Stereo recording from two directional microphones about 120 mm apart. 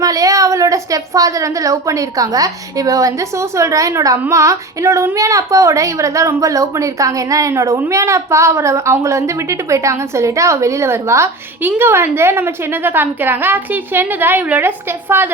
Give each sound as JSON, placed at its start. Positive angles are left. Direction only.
{"t": 0.0, "sound": "speech", "side_deg": -30}